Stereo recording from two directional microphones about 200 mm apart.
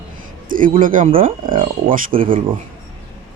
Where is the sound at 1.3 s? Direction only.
25° right (ahead or behind).